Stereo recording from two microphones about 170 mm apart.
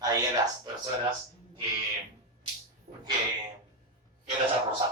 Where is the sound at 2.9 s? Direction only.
40° right (ahead or behind).